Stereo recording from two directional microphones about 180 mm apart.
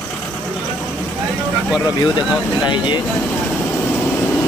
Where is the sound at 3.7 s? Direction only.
10° left (ahead or behind).